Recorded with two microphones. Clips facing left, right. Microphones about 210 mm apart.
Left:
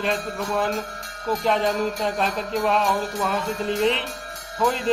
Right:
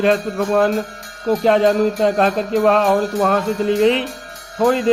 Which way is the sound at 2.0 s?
65° right (ahead or behind).